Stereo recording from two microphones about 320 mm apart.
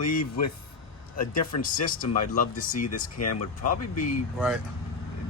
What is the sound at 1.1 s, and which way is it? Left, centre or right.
Speech, left.